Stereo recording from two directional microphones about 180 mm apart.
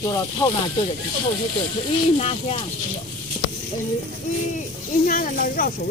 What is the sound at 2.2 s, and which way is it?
Speech, 35° left (ahead or behind).